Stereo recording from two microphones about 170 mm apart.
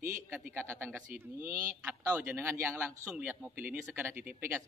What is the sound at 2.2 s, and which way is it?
Speech, 15° right (ahead or behind).